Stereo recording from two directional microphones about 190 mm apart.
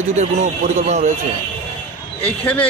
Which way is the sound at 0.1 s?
40° right (ahead or behind).